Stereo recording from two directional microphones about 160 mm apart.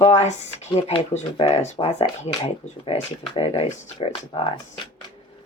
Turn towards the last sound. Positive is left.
turn(degrees=35)  # may be behind; listen again after turning